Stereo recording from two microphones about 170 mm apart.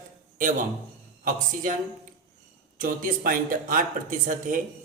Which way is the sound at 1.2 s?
55° right (ahead or behind).